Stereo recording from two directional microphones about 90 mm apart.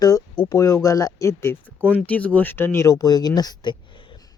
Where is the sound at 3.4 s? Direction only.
50° left (ahead or behind).